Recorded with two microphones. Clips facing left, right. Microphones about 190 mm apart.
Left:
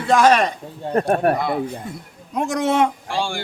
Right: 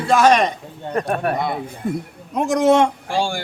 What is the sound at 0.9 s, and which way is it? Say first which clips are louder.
Speech: left 4 dB; 40° left (ahead or behind).